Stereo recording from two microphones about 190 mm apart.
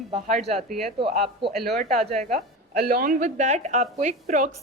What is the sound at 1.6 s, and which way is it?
A woman's voice, 55° right (ahead or behind).